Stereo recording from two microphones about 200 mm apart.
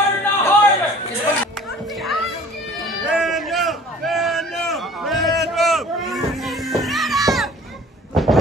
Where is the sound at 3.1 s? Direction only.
Centre (ahead or behind).